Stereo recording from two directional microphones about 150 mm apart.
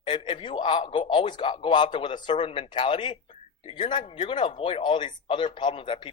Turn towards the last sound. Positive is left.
turn(degrees=35)  # may be behind; listen again after turning